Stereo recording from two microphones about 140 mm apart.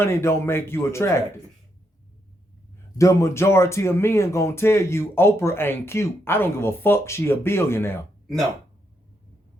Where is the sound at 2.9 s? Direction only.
20° left (ahead or behind).